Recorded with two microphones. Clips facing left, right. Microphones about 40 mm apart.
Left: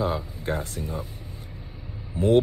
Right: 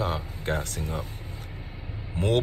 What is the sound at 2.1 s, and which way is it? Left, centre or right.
Speech, right.